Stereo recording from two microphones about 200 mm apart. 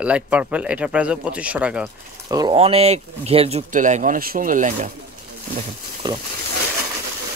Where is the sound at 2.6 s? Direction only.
30° right (ahead or behind).